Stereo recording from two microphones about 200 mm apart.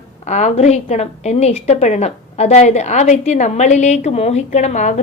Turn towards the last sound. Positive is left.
turn(degrees=35)  # may be behind; listen again after turning